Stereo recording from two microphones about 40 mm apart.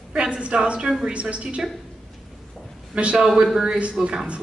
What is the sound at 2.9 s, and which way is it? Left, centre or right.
A man's voice, right.